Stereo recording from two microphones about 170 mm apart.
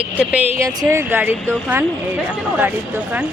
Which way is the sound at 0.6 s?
15° right (ahead or behind).